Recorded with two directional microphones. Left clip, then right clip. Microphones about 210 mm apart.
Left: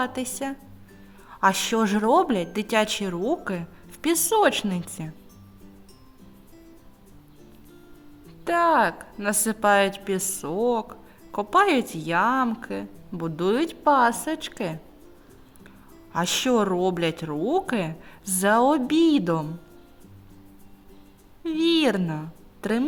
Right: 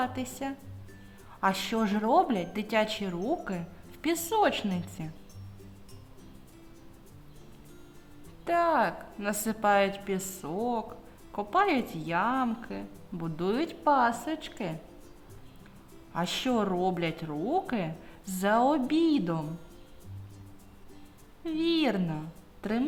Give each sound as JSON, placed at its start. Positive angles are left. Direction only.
{"t": 0.0, "sound": "a woman's voice", "side_deg": 30}
{"t": 8.4, "sound": "a woman's voice", "side_deg": 25}
{"t": 16.1, "sound": "a woman's voice", "side_deg": 30}
{"t": 21.4, "sound": "a woman's voice", "side_deg": 30}